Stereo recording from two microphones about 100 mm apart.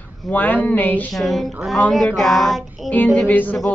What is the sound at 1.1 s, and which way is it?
Music, centre (ahead or behind).